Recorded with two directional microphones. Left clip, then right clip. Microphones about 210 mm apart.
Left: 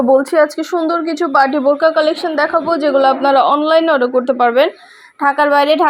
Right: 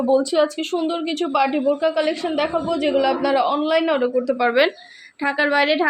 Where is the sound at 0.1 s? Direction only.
15° left (ahead or behind).